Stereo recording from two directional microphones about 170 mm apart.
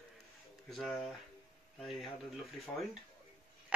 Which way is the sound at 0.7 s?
Centre (ahead or behind).